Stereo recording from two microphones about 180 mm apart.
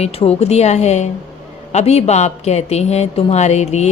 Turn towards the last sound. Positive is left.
turn(degrees=40)  # may be behind; listen again after turning